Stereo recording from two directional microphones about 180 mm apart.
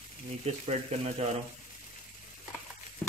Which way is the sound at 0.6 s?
35° right (ahead or behind).